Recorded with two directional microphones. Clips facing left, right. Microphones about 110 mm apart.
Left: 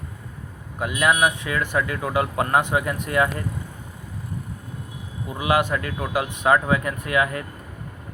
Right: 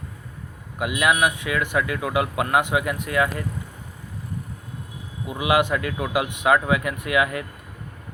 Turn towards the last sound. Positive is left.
turn(degrees=-10)  # may be behind; listen again after turning